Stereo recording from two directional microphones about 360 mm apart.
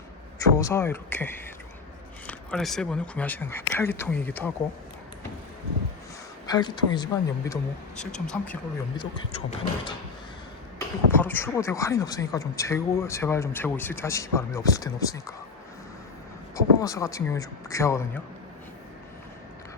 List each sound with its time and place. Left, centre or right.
0.3 s speech: centre
6.5 s speech: centre
9.0 s speech: centre
10.8 s speech: centre
16.6 s speech: centre